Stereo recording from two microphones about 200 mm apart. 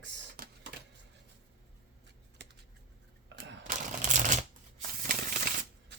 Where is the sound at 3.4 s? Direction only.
45° right (ahead or behind).